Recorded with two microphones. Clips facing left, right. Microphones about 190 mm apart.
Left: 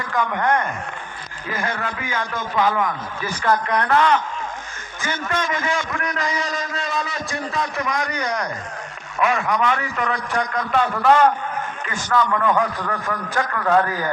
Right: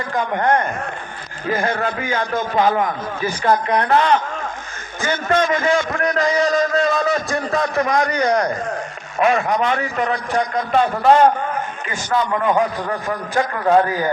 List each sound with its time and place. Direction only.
0.1 s a man's voice: 25° right (ahead or behind)
5.0 s a man's voice: 35° right (ahead or behind); by 14.1 s 20° right (ahead or behind)